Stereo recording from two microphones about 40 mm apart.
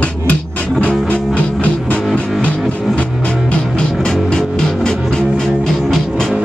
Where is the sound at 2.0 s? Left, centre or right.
Centre.